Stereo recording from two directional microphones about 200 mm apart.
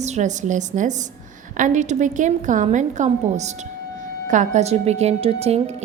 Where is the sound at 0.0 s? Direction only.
35° right (ahead or behind).